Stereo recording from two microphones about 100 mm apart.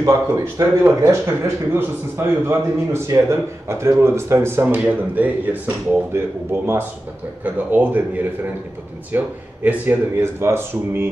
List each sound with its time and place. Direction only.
0.0 s a man's voice: 35° right (ahead or behind)